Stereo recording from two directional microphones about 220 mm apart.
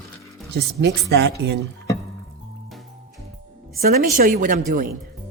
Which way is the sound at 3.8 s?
40° right (ahead or behind).